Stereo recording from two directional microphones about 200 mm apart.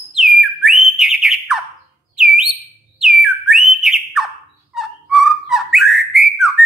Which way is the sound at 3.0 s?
Centre (ahead or behind).